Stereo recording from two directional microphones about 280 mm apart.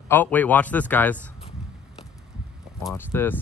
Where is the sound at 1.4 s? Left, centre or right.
Centre.